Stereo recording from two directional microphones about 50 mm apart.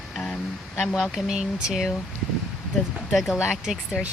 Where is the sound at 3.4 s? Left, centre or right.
Centre.